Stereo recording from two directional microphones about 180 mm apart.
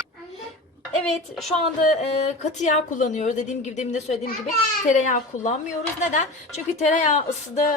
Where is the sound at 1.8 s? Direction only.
40° left (ahead or behind).